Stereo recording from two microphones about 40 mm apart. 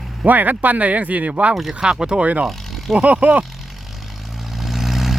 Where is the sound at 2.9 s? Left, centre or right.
Right.